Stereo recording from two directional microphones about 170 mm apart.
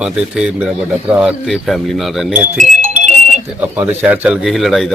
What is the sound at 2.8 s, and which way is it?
Music, 45° right (ahead or behind).